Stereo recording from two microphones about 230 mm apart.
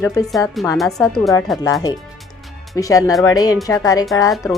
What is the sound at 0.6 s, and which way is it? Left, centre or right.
Speech, centre.